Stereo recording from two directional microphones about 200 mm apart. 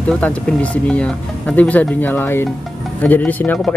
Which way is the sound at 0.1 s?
5° left (ahead or behind).